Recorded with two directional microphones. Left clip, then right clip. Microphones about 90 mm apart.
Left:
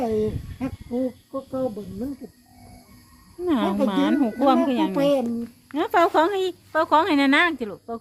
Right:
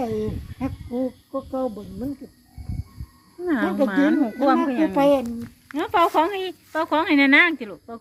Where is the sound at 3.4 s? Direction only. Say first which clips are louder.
Right 1 dB; 15° left (ahead or behind).